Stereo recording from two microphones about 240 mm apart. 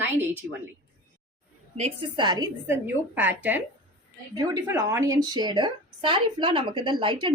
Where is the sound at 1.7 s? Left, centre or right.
Right.